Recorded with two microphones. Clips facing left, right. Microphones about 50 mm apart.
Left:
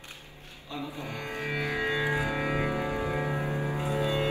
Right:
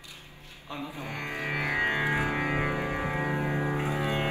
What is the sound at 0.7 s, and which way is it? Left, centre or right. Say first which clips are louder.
Music: even; right.